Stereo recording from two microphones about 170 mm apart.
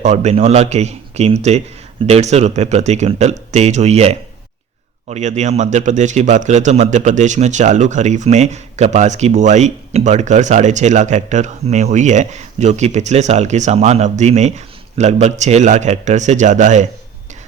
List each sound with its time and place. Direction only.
0.0 s a man's voice: 40° right (ahead or behind)